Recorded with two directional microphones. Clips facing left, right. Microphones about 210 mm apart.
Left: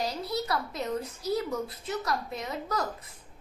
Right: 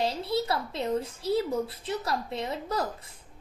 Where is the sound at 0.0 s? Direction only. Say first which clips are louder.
Right 3 dB; 30° right (ahead or behind).